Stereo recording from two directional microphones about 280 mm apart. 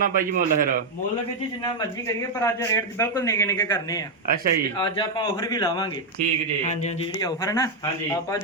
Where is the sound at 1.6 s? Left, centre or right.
Centre.